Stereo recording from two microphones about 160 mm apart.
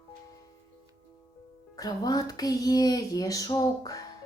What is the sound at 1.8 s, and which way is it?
Speech, 25° left (ahead or behind).